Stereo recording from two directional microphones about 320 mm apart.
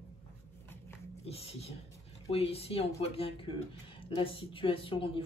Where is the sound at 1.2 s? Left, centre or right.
Centre.